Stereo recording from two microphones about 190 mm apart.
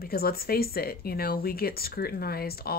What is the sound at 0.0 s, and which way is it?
Speech, 55° left (ahead or behind).